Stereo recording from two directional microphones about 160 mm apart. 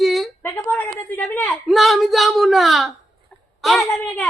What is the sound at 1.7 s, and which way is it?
A woman's voice, centre (ahead or behind).